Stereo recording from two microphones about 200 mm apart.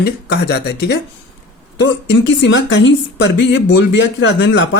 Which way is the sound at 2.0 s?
65° left (ahead or behind).